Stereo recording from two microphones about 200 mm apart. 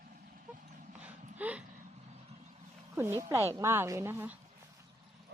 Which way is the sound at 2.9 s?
15° right (ahead or behind).